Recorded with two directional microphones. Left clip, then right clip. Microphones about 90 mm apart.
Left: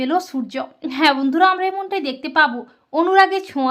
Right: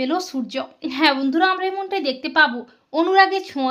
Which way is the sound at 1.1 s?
40° left (ahead or behind).